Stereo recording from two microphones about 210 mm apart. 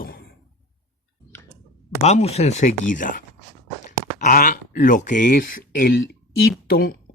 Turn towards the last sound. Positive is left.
turn(degrees=45)  # may be behind; listen again after turning